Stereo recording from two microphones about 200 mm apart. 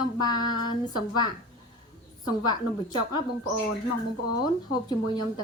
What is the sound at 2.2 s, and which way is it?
Speech, 20° left (ahead or behind).